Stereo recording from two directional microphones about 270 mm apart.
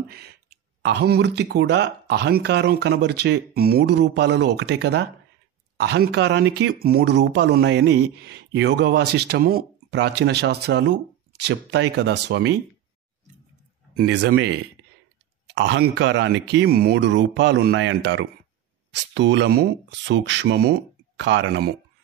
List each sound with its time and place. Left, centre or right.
0.1 s speech: right
13.9 s speech: right